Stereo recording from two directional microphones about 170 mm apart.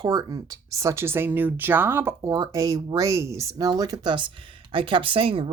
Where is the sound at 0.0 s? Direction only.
25° right (ahead or behind).